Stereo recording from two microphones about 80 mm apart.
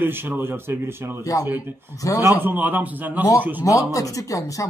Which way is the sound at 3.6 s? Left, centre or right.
Left.